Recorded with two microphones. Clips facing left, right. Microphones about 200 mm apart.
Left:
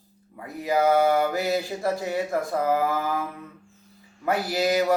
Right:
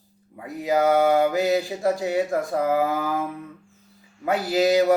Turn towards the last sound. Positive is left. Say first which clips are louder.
# right 4 dB
turn(degrees=-15)  # may be behind; listen again after turning